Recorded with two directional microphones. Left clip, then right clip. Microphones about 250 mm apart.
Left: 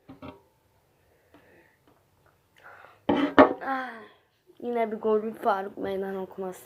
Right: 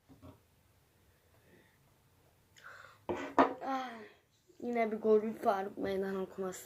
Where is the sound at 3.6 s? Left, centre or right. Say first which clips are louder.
Left 7 dB; centre.